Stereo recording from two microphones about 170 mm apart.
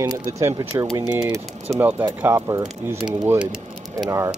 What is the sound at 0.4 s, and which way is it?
Speech, 15° right (ahead or behind).